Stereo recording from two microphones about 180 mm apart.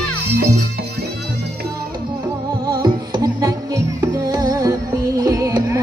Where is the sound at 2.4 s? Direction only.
20° right (ahead or behind).